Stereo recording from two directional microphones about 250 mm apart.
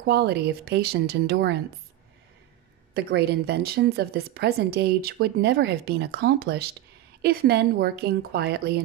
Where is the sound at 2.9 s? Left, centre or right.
Right.